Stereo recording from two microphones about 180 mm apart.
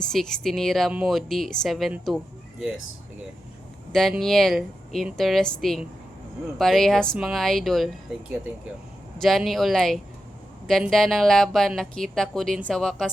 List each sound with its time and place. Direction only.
0.0 s a woman's voice: 5° left (ahead or behind)
3.9 s a woman's voice: centre (ahead or behind)
9.1 s a woman's voice: centre (ahead or behind)